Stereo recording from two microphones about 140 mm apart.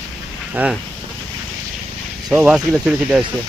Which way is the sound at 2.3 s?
5° right (ahead or behind).